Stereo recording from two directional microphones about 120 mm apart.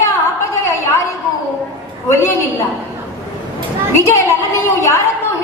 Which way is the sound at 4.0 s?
20° left (ahead or behind).